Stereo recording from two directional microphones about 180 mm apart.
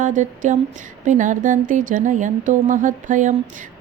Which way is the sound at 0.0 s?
45° right (ahead or behind).